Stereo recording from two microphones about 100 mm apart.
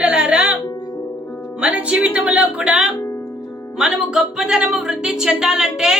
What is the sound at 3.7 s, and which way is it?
Speech, 5° right (ahead or behind).